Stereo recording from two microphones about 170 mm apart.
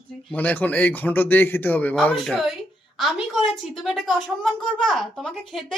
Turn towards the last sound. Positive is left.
turn(degrees=0)  # may be behind; listen again after turning